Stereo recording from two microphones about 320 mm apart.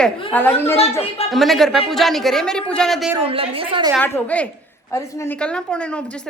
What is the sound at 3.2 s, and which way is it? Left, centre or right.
Speech, centre.